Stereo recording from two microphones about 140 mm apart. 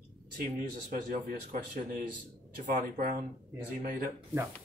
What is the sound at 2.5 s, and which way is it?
Speech, 60° right (ahead or behind).